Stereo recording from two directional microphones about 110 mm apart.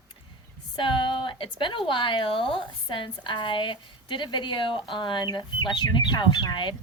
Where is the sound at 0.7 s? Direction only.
50° left (ahead or behind).